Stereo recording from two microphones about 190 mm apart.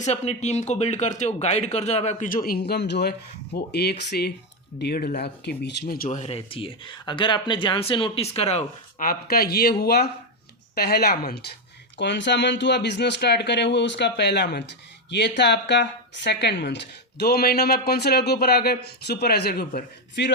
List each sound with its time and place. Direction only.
0.0 s speech: 35° left (ahead or behind); by 20.3 s 60° left (ahead or behind)